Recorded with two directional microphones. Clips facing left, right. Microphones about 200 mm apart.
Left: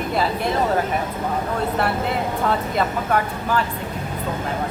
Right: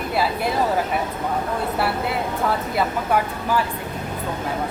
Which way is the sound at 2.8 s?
5° right (ahead or behind).